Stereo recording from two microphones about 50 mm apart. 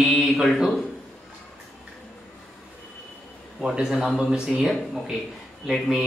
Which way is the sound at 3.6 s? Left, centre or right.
Right.